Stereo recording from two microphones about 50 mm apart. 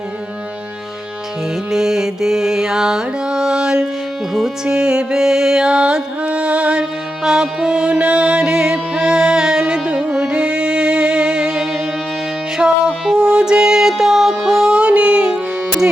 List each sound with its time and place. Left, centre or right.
1.7 s music: centre